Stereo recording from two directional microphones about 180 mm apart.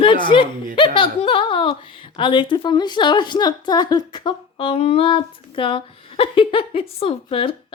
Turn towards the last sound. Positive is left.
turn(degrees=30)  # may be behind; listen again after turning